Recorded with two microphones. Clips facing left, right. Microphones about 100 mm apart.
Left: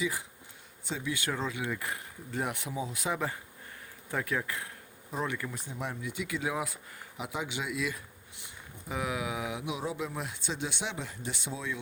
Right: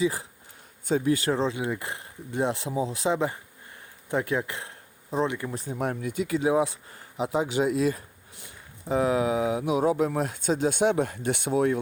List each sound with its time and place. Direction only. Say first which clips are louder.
0.0 s speech: right 7 dB; 35° right (ahead or behind)
0.9 s speech: right 12 dB; 50° right (ahead or behind)
1.2 s speech: right 8 dB; 30° right (ahead or behind)
5.5 s speech: right 8 dB; 40° right (ahead or behind)
5.7 s speech: right 10 dB; 55° right (ahead or behind)
10.2 s speech: right 10 dB; 45° right (ahead or behind)